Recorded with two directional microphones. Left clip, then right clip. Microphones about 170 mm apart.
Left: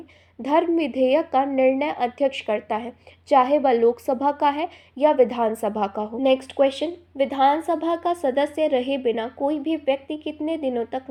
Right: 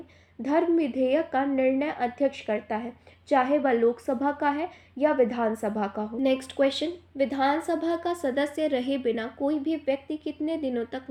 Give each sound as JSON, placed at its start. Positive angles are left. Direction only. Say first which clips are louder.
{"t": 0.4, "sound": "a woman's voice", "louder": "left 4 dB", "side_deg": 25}